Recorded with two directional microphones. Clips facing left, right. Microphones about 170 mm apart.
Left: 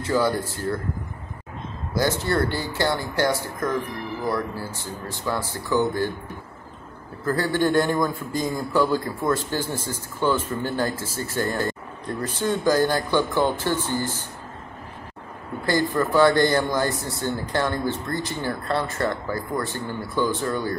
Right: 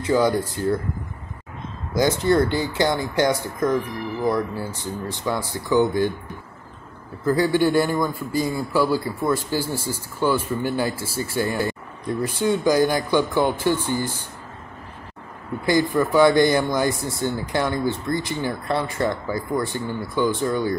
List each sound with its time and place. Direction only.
0.0 s a man's voice: 15° right (ahead or behind)
2.0 s a man's voice: 15° right (ahead or behind)
5.1 s a man's voice: 15° right (ahead or behind)
7.2 s a man's voice: 15° right (ahead or behind)
15.6 s a man's voice: 15° right (ahead or behind)